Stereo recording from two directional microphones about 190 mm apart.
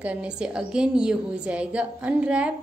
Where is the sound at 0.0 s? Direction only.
5° right (ahead or behind).